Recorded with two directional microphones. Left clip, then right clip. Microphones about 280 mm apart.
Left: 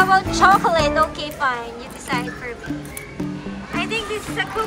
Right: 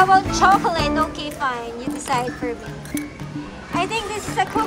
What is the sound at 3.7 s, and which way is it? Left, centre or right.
Music, centre.